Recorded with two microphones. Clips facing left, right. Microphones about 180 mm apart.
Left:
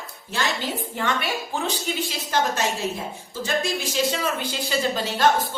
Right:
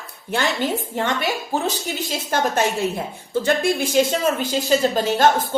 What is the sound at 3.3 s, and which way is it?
Speech, 55° right (ahead or behind).